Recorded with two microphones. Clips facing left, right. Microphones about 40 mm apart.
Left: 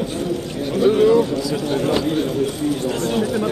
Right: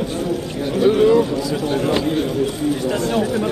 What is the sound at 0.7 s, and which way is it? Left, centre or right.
Speech, right.